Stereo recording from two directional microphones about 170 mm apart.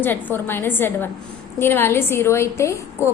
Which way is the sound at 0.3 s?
10° left (ahead or behind).